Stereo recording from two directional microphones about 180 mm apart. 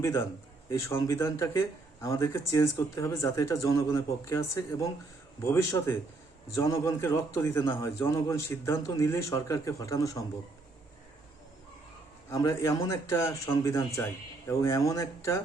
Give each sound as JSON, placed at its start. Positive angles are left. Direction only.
{"t": 0.0, "sound": "speech", "side_deg": 15}
{"t": 12.3, "sound": "speech", "side_deg": 15}